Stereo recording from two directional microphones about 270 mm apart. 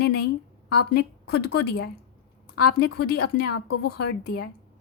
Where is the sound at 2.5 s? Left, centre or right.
Left.